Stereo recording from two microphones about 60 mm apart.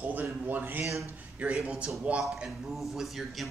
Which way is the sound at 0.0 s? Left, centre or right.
Right.